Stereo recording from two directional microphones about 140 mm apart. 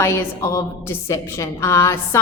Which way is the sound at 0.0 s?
20° left (ahead or behind).